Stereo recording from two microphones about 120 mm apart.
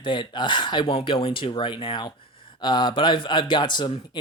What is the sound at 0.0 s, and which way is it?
Speech, 40° left (ahead or behind).